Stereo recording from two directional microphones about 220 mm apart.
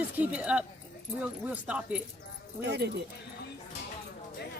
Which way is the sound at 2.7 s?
50° right (ahead or behind).